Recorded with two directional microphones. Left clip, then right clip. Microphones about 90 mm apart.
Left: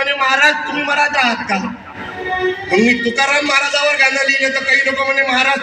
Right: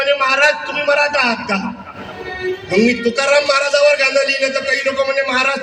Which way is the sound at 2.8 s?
20° right (ahead or behind).